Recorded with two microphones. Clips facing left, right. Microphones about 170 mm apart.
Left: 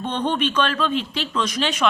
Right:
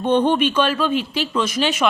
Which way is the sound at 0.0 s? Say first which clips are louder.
Right 6 dB; 10° right (ahead or behind).